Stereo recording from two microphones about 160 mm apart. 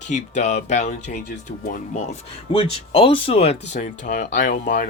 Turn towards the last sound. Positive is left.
turn(degrees=55)  # may be behind; listen again after turning